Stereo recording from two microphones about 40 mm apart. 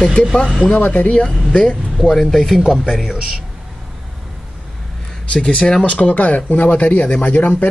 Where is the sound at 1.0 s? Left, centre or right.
Left.